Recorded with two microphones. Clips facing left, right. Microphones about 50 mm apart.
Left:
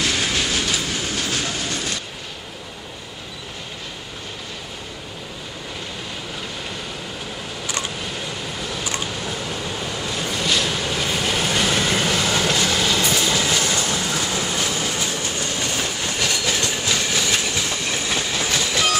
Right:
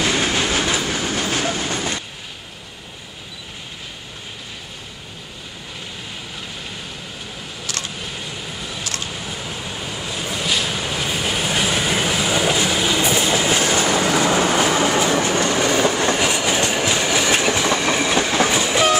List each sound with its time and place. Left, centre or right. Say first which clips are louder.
0.0 s train: right 3 dB; right
7.6 s a sound: left 2 dB; centre
8.0 s vehicle: left 2 dB; centre
8.8 s a sound: left 2 dB; centre
9.1 s train: left 2 dB; centre; by 14.0 s right
14.1 s train: right 7 dB; right
16.2 s train: right 4 dB; right
17.5 s train: right 7 dB; right
18.5 s train: right 4 dB; right